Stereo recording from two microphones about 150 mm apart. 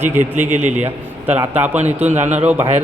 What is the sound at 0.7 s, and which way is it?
Speech, 50° right (ahead or behind).